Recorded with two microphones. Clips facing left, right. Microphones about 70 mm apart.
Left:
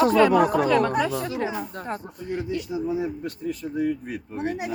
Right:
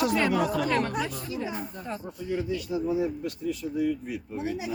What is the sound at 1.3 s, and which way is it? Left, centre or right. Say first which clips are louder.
Speech: left 5 dB; left.